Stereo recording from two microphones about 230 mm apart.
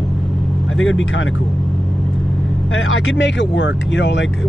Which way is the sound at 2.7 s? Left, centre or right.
Left.